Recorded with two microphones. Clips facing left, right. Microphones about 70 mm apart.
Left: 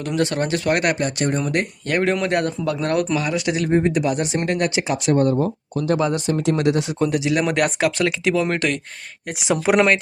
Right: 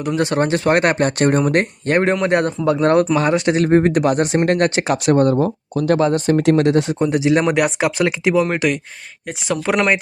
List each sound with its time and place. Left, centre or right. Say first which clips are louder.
0.2 s speech: right 3 dB; right
0.9 s speech: right 6 dB; right
5.0 s speech: right 3 dB; right
6.0 s speech: right 5 dB; right
6.3 s speech: right 6 dB; right
6.6 s speech: right 4 dB; right
7.0 s speech: right 2 dB; right
7.5 s speech: right 2 dB; centre
7.9 s speech: right 2 dB; right
9.5 s speech: left 2 dB; centre